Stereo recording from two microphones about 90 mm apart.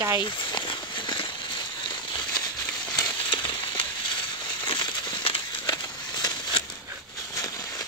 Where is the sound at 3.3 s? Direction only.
70° left (ahead or behind).